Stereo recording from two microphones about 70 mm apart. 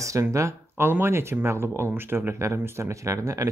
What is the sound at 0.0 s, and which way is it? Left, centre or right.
Speech, right.